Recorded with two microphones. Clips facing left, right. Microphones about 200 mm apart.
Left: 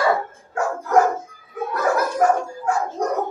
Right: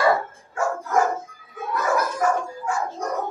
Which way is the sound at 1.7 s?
65° left (ahead or behind).